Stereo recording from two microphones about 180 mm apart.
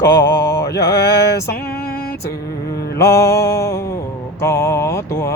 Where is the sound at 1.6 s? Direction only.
60° left (ahead or behind).